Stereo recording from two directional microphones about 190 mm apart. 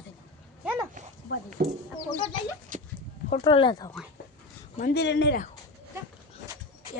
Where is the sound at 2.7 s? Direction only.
45° right (ahead or behind).